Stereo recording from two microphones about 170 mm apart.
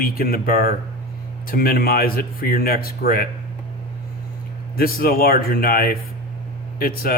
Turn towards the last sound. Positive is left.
turn(degrees=60)  # may be behind; listen again after turning